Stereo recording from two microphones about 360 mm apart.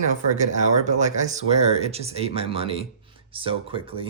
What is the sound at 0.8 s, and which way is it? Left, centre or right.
Speech, centre.